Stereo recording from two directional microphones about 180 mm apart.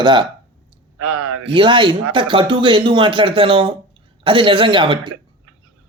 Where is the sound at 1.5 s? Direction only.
25° right (ahead or behind).